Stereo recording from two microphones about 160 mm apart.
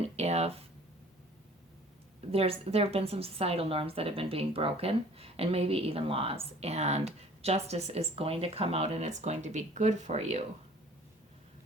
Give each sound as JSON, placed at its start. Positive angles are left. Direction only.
{"t": 0.0, "sound": "speech", "side_deg": -40}
{"t": 2.3, "sound": "a woman's voice", "side_deg": -40}